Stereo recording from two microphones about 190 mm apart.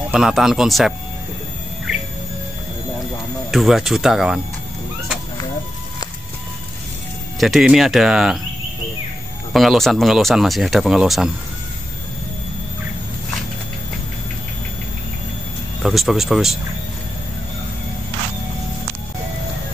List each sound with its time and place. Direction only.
0.1 s speech: 5° right (ahead or behind)
3.5 s speech: centre (ahead or behind)
7.3 s speech: centre (ahead or behind)
9.5 s speech: centre (ahead or behind)
15.8 s speech: centre (ahead or behind)